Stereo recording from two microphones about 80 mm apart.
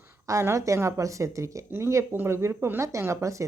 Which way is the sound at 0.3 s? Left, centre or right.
Right.